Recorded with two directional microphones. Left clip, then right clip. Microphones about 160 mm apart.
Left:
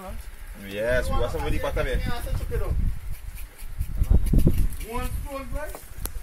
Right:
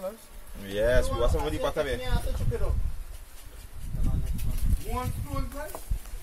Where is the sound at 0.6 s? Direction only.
20° right (ahead or behind).